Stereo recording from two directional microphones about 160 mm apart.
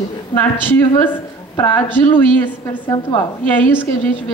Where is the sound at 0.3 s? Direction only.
15° left (ahead or behind).